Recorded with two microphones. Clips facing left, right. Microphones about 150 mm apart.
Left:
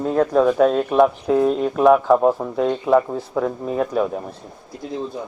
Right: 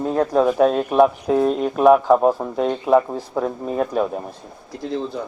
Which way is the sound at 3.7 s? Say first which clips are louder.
Even; 25° right (ahead or behind).